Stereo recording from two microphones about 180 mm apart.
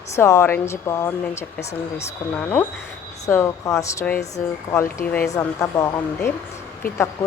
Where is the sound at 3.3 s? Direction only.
15° left (ahead or behind).